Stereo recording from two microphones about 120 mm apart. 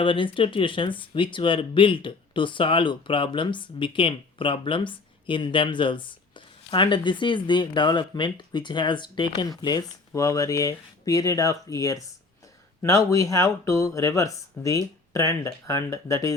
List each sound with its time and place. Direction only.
0.0 s speech: 45° left (ahead or behind); by 16.3 s 25° left (ahead or behind)